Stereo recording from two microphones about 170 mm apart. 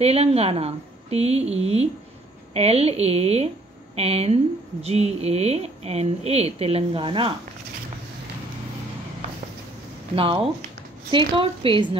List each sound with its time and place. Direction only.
0.0 s speech: 35° right (ahead or behind)
10.1 s speech: 30° right (ahead or behind)